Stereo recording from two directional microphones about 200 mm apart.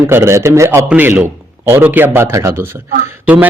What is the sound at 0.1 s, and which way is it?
A man's voice, 15° right (ahead or behind).